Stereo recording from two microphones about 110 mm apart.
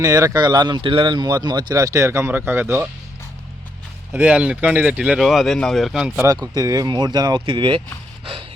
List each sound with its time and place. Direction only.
0.0 s speech: 35° right (ahead or behind)
4.2 s speech: 10° right (ahead or behind)
6.2 s speech: 35° right (ahead or behind); by 7.8 s 50° right (ahead or behind)
8.2 s a sound: 55° right (ahead or behind)